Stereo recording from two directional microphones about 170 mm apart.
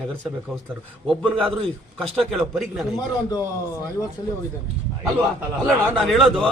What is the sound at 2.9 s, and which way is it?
Speech, 20° left (ahead or behind).